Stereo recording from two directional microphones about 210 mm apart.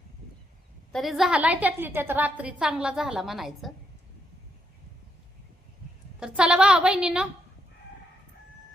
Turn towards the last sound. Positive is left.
turn(degrees=-5)  # may be behind; listen again after turning